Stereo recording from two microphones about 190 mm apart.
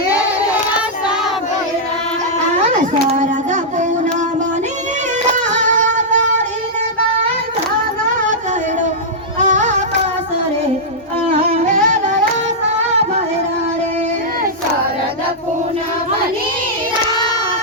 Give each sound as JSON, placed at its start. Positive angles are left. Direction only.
{"t": 2.6, "sound": "a sound", "side_deg": -35}
{"t": 5.3, "sound": "singing", "side_deg": -40}
{"t": 9.4, "sound": "music", "side_deg": -40}
{"t": 11.6, "sound": "music", "side_deg": -40}